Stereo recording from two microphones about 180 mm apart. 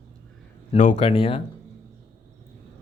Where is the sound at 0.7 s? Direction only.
40° left (ahead or behind).